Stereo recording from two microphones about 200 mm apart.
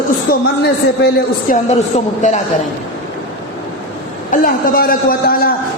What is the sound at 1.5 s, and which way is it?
Speech, 45° left (ahead or behind).